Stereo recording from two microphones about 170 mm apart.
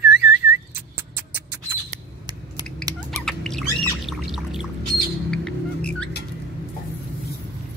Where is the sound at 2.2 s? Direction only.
20° right (ahead or behind).